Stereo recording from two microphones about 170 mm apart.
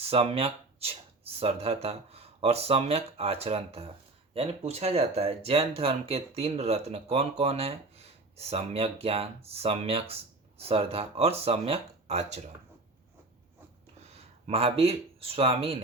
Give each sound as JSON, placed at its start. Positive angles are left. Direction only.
{"t": 0.0, "sound": "speech", "side_deg": -35}
{"t": 14.1, "sound": "speech", "side_deg": -35}